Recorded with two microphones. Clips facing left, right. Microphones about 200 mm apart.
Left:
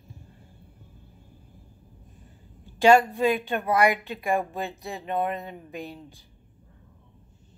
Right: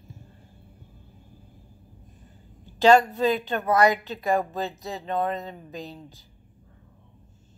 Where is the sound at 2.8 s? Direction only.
10° left (ahead or behind).